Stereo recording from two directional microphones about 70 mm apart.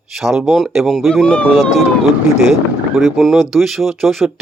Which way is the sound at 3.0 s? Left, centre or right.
Centre.